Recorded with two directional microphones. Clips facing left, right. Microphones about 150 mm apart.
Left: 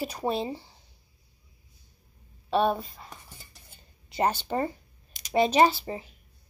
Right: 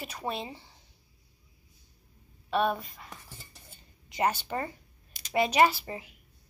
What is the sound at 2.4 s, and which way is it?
Speech, 30° left (ahead or behind).